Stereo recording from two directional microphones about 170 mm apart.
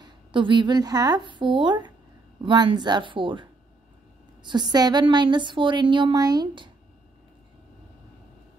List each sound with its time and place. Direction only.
0.0 s a woman's voice: 30° right (ahead or behind)